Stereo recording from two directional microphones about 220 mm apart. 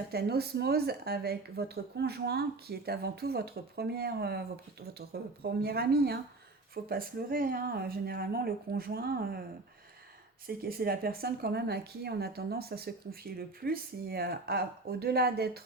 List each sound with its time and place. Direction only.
0.1 s speech: 45° right (ahead or behind)
10.4 s speech: 45° right (ahead or behind)